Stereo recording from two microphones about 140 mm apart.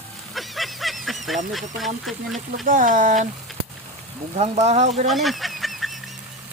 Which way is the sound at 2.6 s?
70° right (ahead or behind).